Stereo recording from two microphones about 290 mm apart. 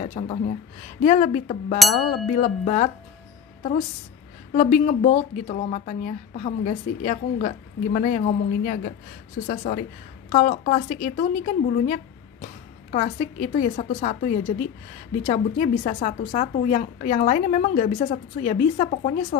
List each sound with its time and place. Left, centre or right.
0.0 s speech: left
4.6 s a woman's voice: left